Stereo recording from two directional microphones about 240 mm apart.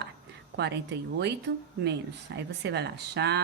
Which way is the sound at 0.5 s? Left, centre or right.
Right.